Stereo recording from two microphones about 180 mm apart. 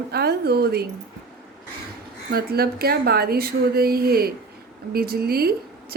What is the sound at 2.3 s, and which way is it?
A woman's voice, 60° right (ahead or behind).